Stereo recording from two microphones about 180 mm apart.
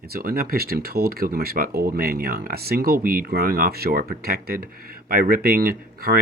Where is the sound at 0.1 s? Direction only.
55° right (ahead or behind).